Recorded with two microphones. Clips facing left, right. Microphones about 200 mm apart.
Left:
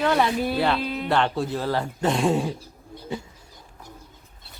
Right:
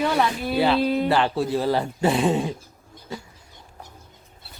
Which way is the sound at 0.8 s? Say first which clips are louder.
Right 7 dB; 40° right (ahead or behind).